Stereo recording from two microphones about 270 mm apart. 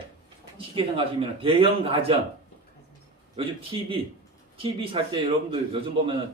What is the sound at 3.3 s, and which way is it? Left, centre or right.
A man's voice, centre.